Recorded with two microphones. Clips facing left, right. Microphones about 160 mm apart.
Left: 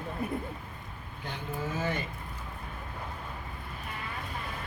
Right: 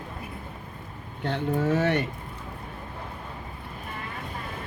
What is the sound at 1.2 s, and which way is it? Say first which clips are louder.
Speech: right 11 dB; 70° right (ahead or behind).